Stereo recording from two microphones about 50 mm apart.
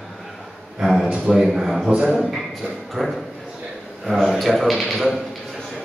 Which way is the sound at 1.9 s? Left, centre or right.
Centre.